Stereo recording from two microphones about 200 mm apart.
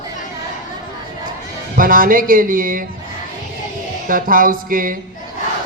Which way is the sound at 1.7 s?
45° right (ahead or behind).